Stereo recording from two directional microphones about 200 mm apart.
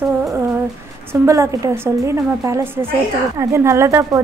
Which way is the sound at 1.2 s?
15° right (ahead or behind).